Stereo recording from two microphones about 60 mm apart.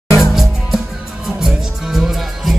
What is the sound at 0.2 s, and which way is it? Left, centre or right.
Music, centre.